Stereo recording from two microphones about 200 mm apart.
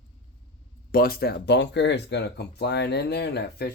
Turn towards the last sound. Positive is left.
turn(degrees=55)  # may be behind; listen again after turning